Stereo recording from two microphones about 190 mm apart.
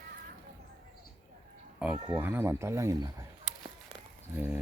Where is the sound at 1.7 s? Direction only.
5° right (ahead or behind).